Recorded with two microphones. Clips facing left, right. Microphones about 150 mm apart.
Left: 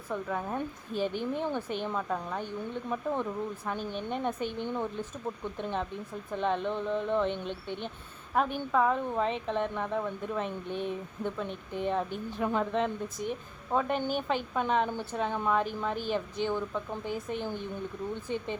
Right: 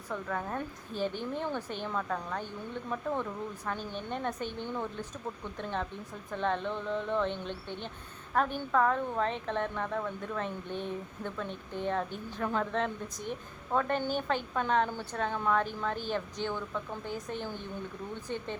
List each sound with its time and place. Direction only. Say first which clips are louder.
0.1 s a woman's voice: left 2 dB; 10° left (ahead or behind)
3.7 s a woman's voice: even; 15° left (ahead or behind)
6.3 s a woman's voice: left 2 dB; 15° left (ahead or behind)